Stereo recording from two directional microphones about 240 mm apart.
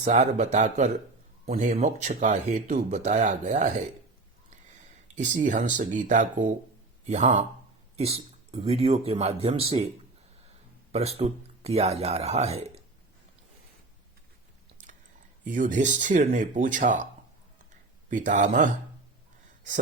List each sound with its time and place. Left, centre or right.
0.0 s speech: right
10.9 s speech: right
15.4 s speech: right
18.1 s speech: right